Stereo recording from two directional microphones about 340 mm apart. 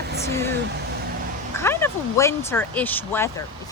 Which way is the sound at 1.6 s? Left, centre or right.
Centre.